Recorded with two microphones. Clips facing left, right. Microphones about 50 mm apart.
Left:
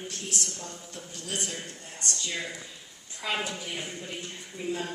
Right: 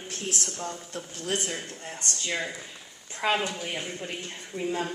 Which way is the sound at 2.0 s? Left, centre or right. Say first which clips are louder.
Right 2 dB; right.